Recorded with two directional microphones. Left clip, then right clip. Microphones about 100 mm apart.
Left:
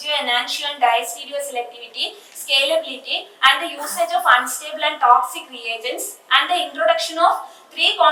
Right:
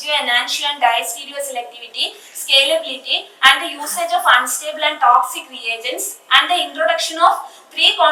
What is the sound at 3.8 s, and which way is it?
A woman's voice, 15° left (ahead or behind).